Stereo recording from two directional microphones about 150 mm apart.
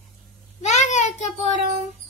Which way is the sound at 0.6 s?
50° left (ahead or behind).